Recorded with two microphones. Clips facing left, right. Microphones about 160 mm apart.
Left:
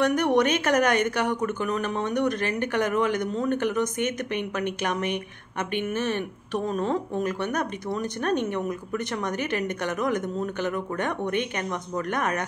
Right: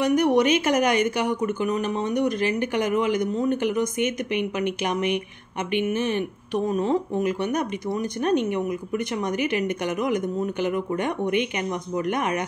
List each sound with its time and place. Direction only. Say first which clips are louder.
0.0 s speech: right 2 dB; 10° right (ahead or behind)